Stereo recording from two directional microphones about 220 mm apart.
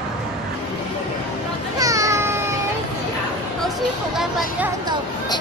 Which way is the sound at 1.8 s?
15° right (ahead or behind).